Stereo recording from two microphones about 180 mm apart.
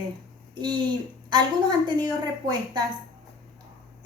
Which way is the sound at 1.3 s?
25° right (ahead or behind).